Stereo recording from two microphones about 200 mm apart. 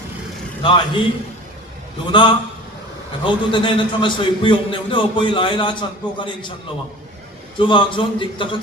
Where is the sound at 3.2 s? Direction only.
25° left (ahead or behind).